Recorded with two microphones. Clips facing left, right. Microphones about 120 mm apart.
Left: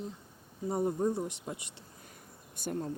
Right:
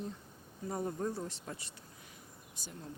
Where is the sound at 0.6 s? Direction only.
20° left (ahead or behind).